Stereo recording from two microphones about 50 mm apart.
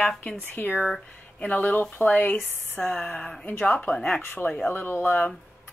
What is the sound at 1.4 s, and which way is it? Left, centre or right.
Speech, left.